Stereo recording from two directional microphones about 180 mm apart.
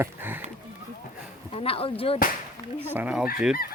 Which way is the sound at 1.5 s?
30° left (ahead or behind).